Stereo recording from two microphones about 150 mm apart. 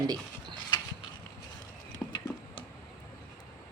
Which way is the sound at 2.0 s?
5° left (ahead or behind).